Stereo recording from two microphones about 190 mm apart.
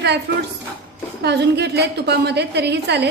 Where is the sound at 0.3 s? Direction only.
60° right (ahead or behind).